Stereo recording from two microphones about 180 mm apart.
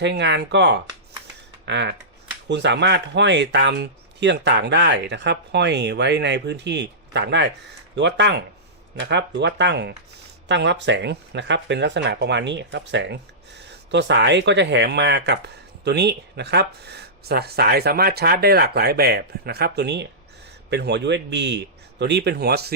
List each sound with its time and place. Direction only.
0.0 s speech: 75° right (ahead or behind)